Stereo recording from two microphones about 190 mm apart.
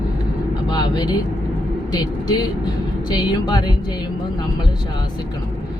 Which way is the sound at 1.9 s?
20° left (ahead or behind).